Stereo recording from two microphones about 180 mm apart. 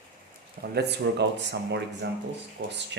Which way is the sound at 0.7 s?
65° right (ahead or behind).